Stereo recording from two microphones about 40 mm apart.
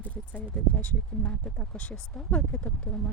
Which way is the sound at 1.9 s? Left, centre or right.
Centre.